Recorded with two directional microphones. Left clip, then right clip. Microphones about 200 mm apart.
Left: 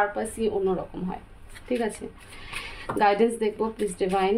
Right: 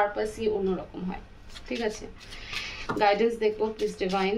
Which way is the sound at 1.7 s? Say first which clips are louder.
Left 6 dB; 55° left (ahead or behind).